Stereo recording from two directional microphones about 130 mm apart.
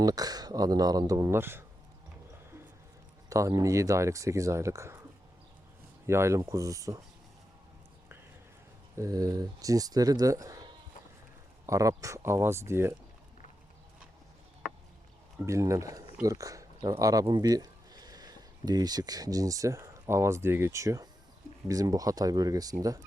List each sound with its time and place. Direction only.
0.0 s speech: 30° right (ahead or behind)
3.2 s speech: 25° right (ahead or behind)
6.1 s speech: 20° right (ahead or behind)
9.0 s speech: 25° right (ahead or behind)
11.6 s speech: 25° right (ahead or behind)
15.4 s speech: 25° right (ahead or behind)